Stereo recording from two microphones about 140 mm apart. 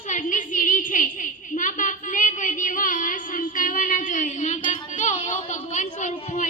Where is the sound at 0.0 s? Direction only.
60° left (ahead or behind).